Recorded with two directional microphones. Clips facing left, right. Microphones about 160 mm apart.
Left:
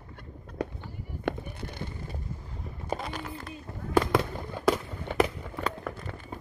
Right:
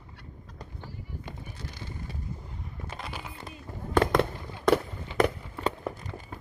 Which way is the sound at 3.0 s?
5° right (ahead or behind).